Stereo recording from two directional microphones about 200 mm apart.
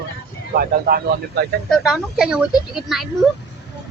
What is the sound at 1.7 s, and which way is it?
Speech, centre (ahead or behind).